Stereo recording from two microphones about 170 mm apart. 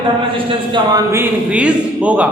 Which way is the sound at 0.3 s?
30° right (ahead or behind).